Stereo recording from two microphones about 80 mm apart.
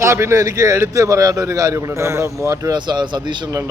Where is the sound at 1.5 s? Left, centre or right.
Right.